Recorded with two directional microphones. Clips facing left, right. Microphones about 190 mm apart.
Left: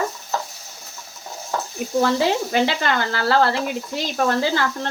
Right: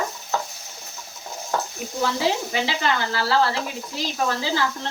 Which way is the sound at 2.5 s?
55° left (ahead or behind).